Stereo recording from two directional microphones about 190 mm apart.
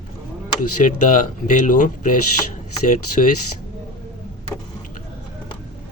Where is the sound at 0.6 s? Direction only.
40° left (ahead or behind).